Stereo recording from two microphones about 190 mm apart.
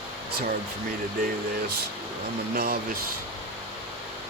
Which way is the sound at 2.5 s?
55° right (ahead or behind).